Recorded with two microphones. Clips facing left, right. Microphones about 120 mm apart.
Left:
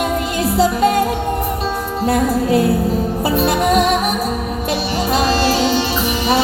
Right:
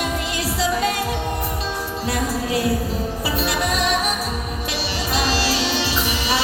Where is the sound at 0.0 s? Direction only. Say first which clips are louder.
Left 6 dB; 45° left (ahead or behind).